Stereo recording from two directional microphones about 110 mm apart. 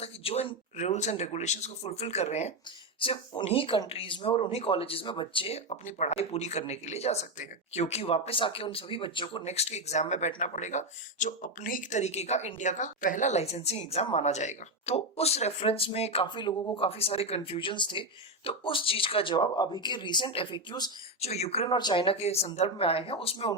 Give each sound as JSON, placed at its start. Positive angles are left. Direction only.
{"t": 0.0, "sound": "speech", "side_deg": 65}
{"t": 3.0, "sound": "a woman's voice", "side_deg": 55}
{"t": 5.6, "sound": "speech", "side_deg": 80}
{"t": 8.4, "sound": "speech", "side_deg": 50}
{"t": 9.4, "sound": "speech", "side_deg": 80}
{"t": 13.2, "sound": "speech", "side_deg": 80}
{"t": 16.2, "sound": "speech", "side_deg": 45}
{"t": 16.7, "sound": "a woman's voice", "side_deg": 60}
{"t": 21.2, "sound": "speech", "side_deg": 75}
{"t": 21.7, "sound": "speech", "side_deg": 45}
{"t": 22.0, "sound": "a woman's voice", "side_deg": 65}